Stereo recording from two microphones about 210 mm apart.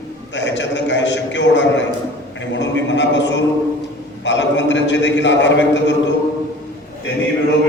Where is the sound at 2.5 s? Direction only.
60° left (ahead or behind).